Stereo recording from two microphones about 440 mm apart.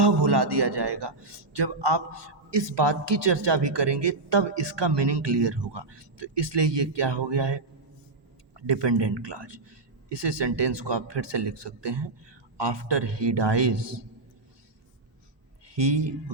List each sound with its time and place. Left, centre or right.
0.0 s a man's voice: right
15.6 s speech: right